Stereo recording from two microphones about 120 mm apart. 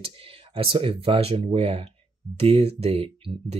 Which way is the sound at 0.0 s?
50° right (ahead or behind).